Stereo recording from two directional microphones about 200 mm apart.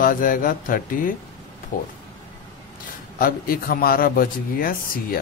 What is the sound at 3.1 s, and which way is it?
Speech, 45° left (ahead or behind).